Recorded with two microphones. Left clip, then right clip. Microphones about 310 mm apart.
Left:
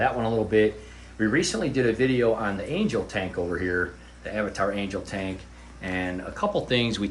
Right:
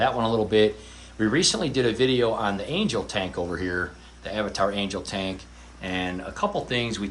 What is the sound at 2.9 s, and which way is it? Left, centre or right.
Speech, centre.